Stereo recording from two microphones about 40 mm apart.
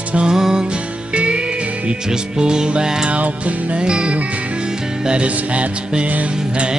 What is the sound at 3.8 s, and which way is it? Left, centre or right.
Music, right.